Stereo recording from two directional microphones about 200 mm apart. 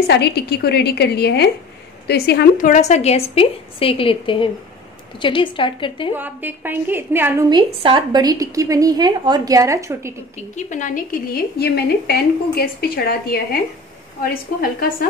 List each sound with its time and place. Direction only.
0.1 s a woman's voice: 55° left (ahead or behind); by 6.1 s 25° left (ahead or behind)
6.1 s a woman's voice: 10° right (ahead or behind)
7.4 s a woman's voice: 25° right (ahead or behind)
10.5 s a woman's voice: 40° left (ahead or behind)
11.3 s a woman's voice: 50° left (ahead or behind)